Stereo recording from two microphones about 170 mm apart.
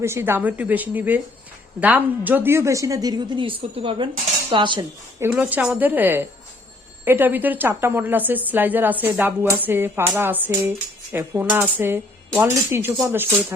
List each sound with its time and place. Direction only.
0.0 s cutlery: 15° right (ahead or behind)
1.8 s speech: 10° right (ahead or behind); by 4.9 s 30° right (ahead or behind)
5.2 s cutlery: 10° right (ahead or behind)